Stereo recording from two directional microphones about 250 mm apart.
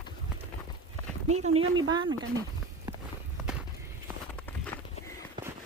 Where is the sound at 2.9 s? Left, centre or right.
Centre.